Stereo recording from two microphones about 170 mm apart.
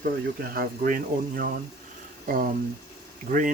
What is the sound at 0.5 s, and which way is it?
Speech, 60° right (ahead or behind).